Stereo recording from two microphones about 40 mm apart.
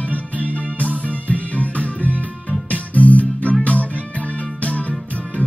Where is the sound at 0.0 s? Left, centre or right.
Left.